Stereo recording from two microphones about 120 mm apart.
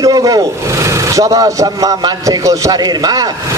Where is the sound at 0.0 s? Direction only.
30° right (ahead or behind).